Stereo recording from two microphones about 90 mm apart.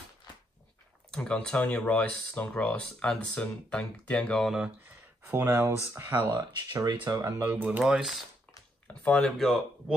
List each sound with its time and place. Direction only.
1.1 s speech: 10° left (ahead or behind)
4.5 s speech: 10° right (ahead or behind)
5.2 s speech: 25° right (ahead or behind)
6.3 s speech: 50° right (ahead or behind)
7.2 s speech: 25° right (ahead or behind)
7.8 s speech: 5° right (ahead or behind)
8.8 s speech: 15° left (ahead or behind)